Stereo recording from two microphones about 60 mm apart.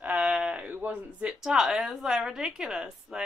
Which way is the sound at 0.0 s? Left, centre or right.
Right.